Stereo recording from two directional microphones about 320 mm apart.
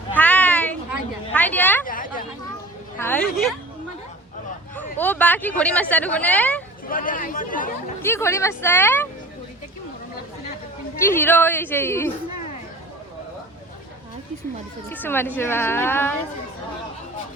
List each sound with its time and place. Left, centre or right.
0.2 s a sound: centre
1.8 s a sound: left
3.0 s a woman's voice: centre
4.9 s speech: centre
6.9 s speech: left
8.0 s a woman's voice: centre
11.0 s a woman's voice: centre
14.8 s a woman's voice: centre